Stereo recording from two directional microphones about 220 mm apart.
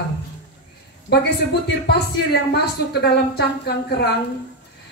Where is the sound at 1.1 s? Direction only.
50° left (ahead or behind).